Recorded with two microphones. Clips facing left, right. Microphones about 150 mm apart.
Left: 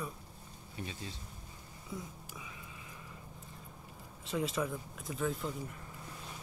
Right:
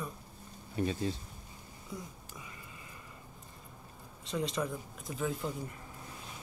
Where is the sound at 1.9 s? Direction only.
Centre (ahead or behind).